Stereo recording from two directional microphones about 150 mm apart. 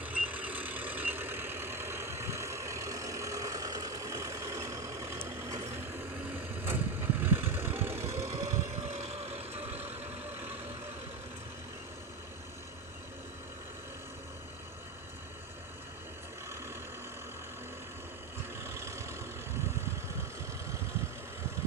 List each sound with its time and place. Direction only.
0.0 s vehicle: 10° right (ahead or behind)
8.7 s vehicle: 50° right (ahead or behind)
18.6 s vehicle: 15° right (ahead or behind)